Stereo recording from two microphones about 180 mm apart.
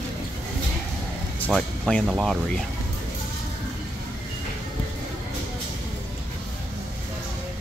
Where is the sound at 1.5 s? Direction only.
Centre (ahead or behind).